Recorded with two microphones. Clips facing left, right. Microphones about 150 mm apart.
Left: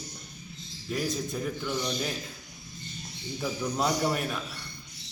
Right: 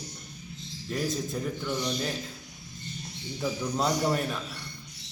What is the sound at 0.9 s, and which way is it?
A man's voice, centre (ahead or behind).